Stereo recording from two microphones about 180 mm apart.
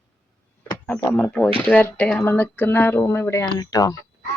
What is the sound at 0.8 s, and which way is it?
A woman's voice, 5° left (ahead or behind).